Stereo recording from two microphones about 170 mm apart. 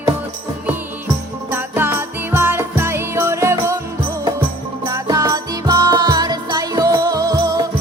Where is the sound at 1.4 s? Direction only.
10° right (ahead or behind).